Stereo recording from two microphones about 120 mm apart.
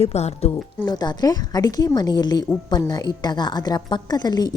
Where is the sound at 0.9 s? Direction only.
35° left (ahead or behind).